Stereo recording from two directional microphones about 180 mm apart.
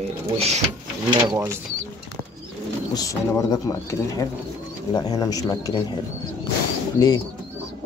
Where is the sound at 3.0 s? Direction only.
20° left (ahead or behind).